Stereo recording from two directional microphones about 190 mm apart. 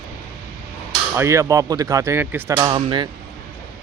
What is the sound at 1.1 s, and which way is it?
Speech, 15° right (ahead or behind).